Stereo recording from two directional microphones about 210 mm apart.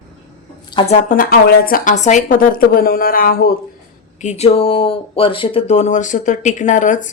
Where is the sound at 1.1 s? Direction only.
45° left (ahead or behind).